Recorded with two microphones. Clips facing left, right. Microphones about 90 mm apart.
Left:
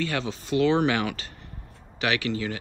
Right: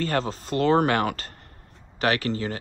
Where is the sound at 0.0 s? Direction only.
40° right (ahead or behind).